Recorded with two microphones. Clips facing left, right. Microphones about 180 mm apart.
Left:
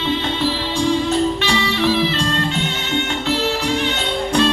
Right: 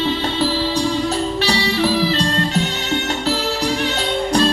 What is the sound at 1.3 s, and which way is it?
Music, 35° right (ahead or behind).